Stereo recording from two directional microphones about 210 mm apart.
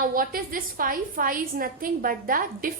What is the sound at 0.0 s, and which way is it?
A woman's voice, 40° right (ahead or behind).